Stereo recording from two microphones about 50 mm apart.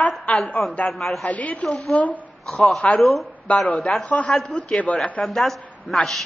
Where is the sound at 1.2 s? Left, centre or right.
Left.